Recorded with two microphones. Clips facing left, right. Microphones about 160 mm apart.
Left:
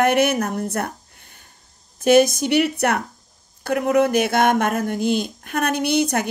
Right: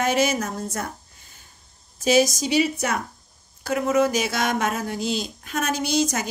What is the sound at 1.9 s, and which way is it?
Speech, 60° left (ahead or behind).